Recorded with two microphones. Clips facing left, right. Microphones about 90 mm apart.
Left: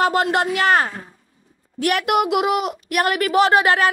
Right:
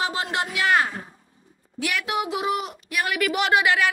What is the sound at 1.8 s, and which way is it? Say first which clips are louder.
A woman's voice: left 8 dB; 55° left (ahead or behind).